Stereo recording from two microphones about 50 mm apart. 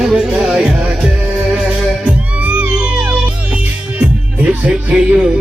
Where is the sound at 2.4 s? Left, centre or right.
Right.